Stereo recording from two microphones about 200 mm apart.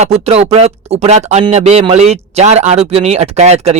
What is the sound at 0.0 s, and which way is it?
Speech, 30° right (ahead or behind).